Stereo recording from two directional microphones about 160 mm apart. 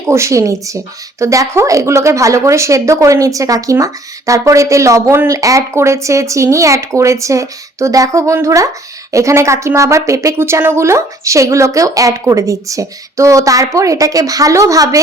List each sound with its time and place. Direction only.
0.1 s a woman's voice: 20° right (ahead or behind)